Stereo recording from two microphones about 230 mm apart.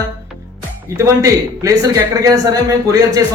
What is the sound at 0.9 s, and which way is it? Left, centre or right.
A man's voice, centre.